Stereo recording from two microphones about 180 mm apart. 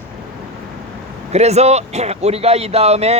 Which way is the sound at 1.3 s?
35° right (ahead or behind).